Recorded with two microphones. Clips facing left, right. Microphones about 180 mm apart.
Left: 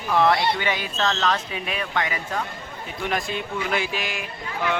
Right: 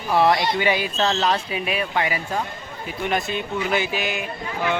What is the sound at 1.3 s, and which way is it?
A man's voice, 10° right (ahead or behind).